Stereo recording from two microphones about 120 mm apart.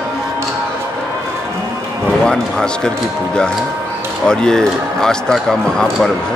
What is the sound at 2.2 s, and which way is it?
Speech, 5° left (ahead or behind).